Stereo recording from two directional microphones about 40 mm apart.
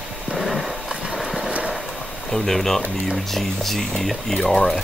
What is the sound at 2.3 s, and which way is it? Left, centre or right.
Speech, centre.